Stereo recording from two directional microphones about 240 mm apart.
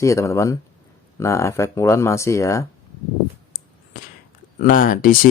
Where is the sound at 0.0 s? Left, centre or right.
Centre.